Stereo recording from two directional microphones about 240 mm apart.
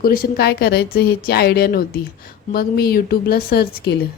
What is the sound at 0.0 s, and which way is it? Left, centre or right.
Speech, left.